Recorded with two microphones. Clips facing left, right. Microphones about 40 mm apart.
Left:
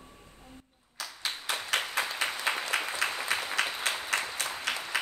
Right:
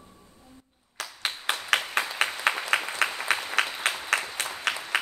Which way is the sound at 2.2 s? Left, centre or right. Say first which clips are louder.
Right 4 dB; right.